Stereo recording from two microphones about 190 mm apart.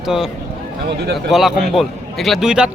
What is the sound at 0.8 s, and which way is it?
Speech, 60° right (ahead or behind).